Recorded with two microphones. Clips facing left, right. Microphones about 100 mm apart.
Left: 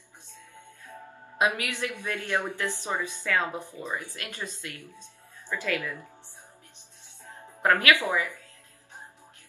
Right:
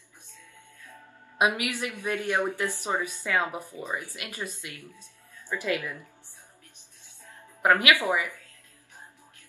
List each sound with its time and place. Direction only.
1.4 s speech: 20° right (ahead or behind)
7.6 s speech: 15° right (ahead or behind)